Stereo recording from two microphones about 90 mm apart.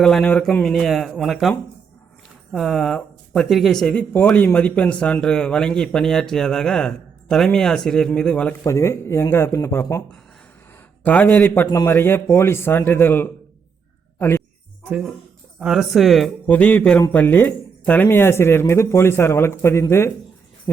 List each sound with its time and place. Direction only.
0.0 s speech: 5° left (ahead or behind)
3.9 s a man's voice: 20° left (ahead or behind)
8.6 s speech: 35° left (ahead or behind)
11.0 s speech: 20° left (ahead or behind)
14.2 s a sound: 25° left (ahead or behind)
14.8 s speech: 15° right (ahead or behind)
16.5 s a man's voice: 15° left (ahead or behind)